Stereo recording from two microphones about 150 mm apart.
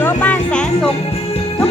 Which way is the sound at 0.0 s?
10° left (ahead or behind).